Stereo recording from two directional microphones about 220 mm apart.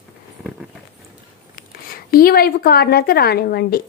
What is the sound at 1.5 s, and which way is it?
A woman's voice, 40° left (ahead or behind).